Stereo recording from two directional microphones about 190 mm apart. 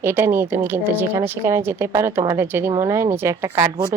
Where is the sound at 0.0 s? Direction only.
10° right (ahead or behind).